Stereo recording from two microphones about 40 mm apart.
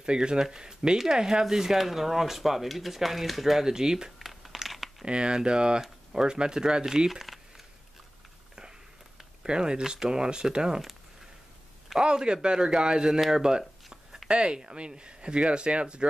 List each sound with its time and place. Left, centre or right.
0.0 s speech: right; by 3.6 s centre
3.6 s speech: centre
4.2 s crumpling: centre
5.0 s speech: right
7.1 s speech: centre
9.4 s speech: centre
12.0 s speech: right
13.8 s a sound: centre
14.3 s speech: right